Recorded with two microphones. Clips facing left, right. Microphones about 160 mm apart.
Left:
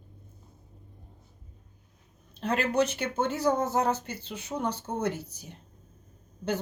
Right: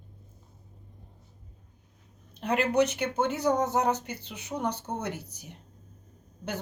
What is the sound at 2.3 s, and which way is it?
Speech, 15° right (ahead or behind).